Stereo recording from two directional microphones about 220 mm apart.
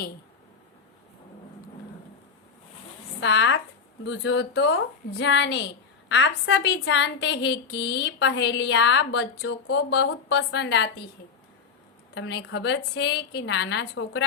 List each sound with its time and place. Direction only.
3.2 s a woman's voice: 55° left (ahead or behind)
12.1 s a woman's voice: 50° left (ahead or behind)